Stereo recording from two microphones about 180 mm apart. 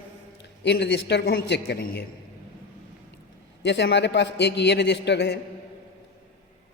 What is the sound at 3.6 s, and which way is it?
A man's voice, 70° left (ahead or behind).